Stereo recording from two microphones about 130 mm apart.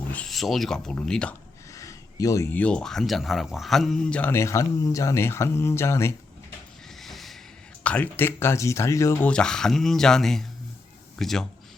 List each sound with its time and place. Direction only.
0.1 s speech: 5° left (ahead or behind)
1.7 s a sound: 25° left (ahead or behind)
2.6 s speech: 10° left (ahead or behind)
4.3 s speech: 20° left (ahead or behind)
7.0 s a sound: centre (ahead or behind)
7.9 s speech: 15° left (ahead or behind)
9.2 s speech: 5° left (ahead or behind)